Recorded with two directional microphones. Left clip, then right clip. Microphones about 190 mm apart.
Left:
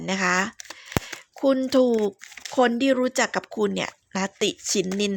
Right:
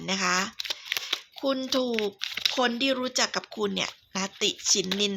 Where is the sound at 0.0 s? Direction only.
40° left (ahead or behind).